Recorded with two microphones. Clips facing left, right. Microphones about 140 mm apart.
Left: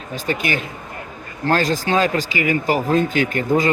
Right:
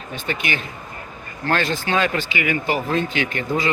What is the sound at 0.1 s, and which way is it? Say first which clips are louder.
Speech: left 4 dB; 40° left (ahead or behind).